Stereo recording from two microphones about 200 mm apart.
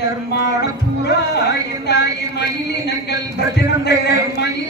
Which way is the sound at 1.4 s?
60° left (ahead or behind).